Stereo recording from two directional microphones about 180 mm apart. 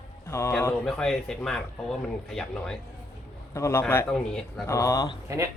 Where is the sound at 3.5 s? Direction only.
15° left (ahead or behind).